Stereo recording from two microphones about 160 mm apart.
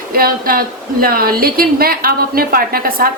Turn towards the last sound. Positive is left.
turn(degrees=-65)  # may be behind; listen again after turning